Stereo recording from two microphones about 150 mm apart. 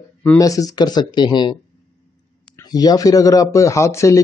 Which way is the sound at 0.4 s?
25° left (ahead or behind).